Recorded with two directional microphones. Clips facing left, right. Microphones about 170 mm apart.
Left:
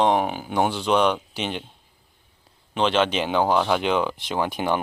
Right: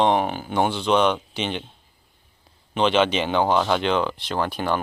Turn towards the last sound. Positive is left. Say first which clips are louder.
# even
turn(degrees=15)  # may be behind; listen again after turning